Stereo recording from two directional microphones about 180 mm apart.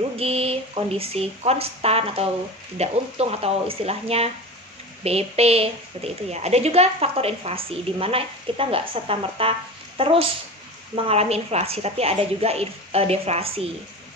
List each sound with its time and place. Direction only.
0.2 s a woman's voice: 35° right (ahead or behind)